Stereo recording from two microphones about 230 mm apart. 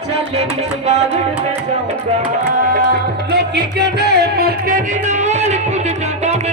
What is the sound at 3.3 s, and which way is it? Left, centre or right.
Music, right.